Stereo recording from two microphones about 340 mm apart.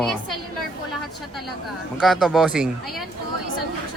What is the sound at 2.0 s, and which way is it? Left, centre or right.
Speech, centre.